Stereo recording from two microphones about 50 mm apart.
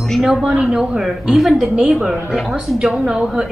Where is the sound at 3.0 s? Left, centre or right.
Centre.